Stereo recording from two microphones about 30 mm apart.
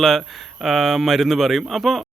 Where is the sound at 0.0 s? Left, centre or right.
Centre.